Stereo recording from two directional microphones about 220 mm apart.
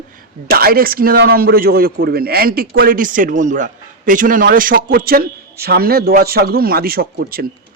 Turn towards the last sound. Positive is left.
turn(degrees=-45)  # may be behind; listen again after turning